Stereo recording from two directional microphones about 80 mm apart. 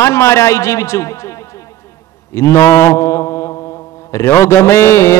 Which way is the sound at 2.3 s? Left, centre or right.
Left.